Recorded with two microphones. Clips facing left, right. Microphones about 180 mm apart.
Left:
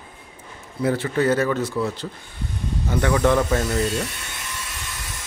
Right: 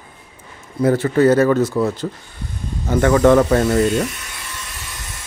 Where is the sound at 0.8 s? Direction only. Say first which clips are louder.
Right 7 dB; 45° right (ahead or behind).